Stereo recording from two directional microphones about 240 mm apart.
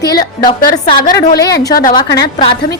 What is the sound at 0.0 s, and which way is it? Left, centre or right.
Speech, centre.